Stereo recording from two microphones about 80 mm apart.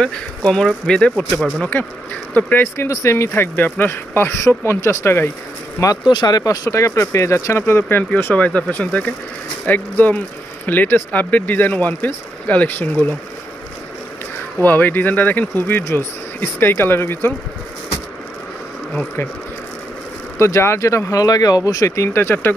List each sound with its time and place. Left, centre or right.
0.0 s speech: centre
1.7 s speech: left
2.9 s speech: left
3.5 s speech: left
6.0 s speech: left
8.1 s speech: left
14.6 s speech: left
20.3 s speech: left